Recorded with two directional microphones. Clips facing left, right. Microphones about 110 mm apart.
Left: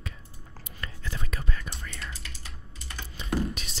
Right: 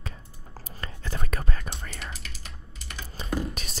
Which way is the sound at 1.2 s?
50° right (ahead or behind).